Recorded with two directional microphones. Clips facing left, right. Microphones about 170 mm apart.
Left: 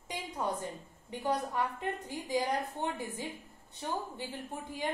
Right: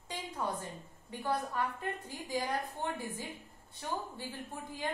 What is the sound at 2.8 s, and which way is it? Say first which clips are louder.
A woman's voice: left 2 dB; 20° left (ahead or behind).